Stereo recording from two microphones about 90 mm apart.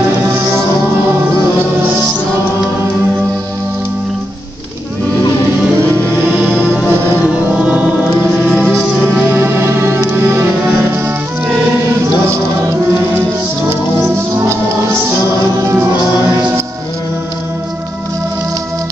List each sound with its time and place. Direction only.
6.8 s music: 10° right (ahead or behind)
8.5 s music: 10° left (ahead or behind)
9.2 s music: 25° right (ahead or behind)
12.3 s music: 30° right (ahead or behind)